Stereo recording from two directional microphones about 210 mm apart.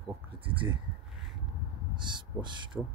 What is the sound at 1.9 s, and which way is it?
Speech, 20° right (ahead or behind).